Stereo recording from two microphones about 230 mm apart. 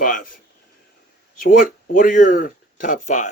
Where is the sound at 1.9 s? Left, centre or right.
Left.